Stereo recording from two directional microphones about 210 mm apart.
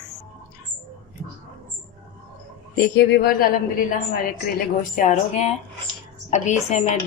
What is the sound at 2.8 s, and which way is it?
Speech, 50° left (ahead or behind).